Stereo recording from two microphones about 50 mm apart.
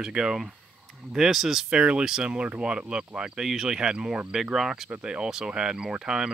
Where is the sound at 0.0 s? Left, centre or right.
Centre.